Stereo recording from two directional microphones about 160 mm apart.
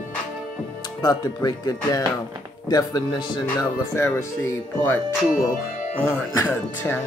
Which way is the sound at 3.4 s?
15° left (ahead or behind).